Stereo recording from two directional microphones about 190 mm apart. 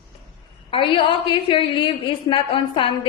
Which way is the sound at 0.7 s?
25° left (ahead or behind).